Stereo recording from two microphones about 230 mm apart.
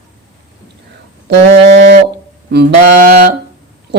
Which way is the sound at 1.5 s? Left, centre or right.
Right.